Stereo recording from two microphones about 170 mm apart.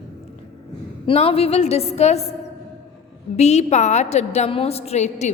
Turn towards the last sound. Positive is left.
turn(degrees=40)  # may be behind; listen again after turning